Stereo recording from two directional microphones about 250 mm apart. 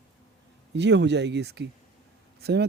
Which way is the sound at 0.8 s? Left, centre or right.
Right.